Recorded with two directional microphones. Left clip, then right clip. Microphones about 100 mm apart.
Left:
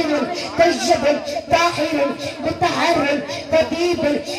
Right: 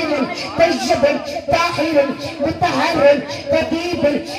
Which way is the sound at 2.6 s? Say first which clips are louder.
Right 4 dB; 15° left (ahead or behind).